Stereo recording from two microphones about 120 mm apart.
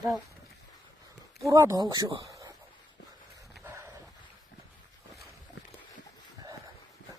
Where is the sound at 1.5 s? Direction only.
25° right (ahead or behind).